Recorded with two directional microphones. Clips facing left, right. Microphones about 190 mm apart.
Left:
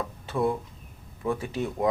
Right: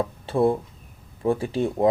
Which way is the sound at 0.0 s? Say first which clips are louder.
Right 6 dB; 30° right (ahead or behind).